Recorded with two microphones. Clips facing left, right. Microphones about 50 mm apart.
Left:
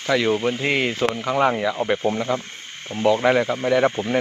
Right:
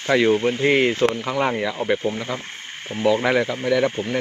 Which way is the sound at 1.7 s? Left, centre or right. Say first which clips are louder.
Left 1 dB; centre.